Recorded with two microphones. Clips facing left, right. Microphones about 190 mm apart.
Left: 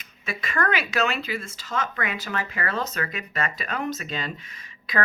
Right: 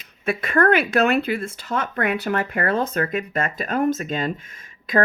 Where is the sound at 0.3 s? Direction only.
55° right (ahead or behind).